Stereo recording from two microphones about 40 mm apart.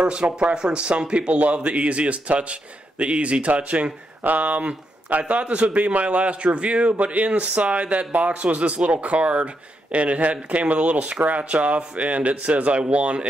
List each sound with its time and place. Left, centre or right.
0.0 s speech: right